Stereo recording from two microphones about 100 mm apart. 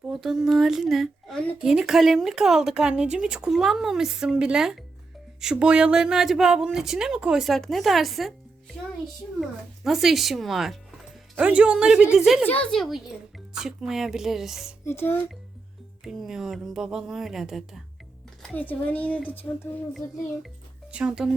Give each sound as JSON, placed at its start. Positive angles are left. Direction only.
{"t": 0.1, "sound": "speech", "side_deg": -5}
{"t": 9.4, "sound": "speech", "side_deg": 0}
{"t": 11.3, "sound": "speech", "side_deg": -10}
{"t": 12.5, "sound": "speech", "side_deg": 15}
{"t": 12.7, "sound": "speech", "side_deg": 0}
{"t": 14.8, "sound": "a child's voice", "side_deg": 20}
{"t": 16.0, "sound": "speech", "side_deg": -5}
{"t": 18.4, "sound": "speech", "side_deg": 15}
{"t": 20.9, "sound": "speech", "side_deg": -10}